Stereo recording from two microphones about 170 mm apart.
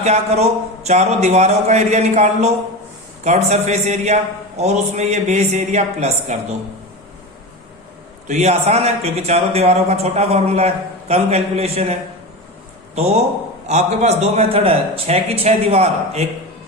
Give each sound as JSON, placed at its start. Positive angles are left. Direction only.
{"t": 0.0, "sound": "a man's voice", "side_deg": -40}
{"t": 8.3, "sound": "a man's voice", "side_deg": -40}
{"t": 13.7, "sound": "a man's voice", "side_deg": -40}